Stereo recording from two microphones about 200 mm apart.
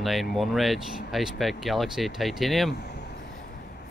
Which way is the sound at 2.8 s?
55° left (ahead or behind).